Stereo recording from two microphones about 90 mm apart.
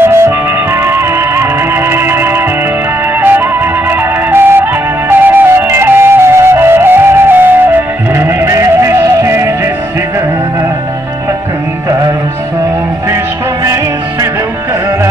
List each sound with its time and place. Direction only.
0.0 s music: 30° right (ahead or behind)